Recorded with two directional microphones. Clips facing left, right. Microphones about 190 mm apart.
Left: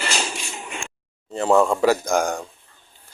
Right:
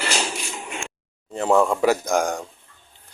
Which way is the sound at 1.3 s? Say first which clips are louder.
Left 1 dB; 15° right (ahead or behind).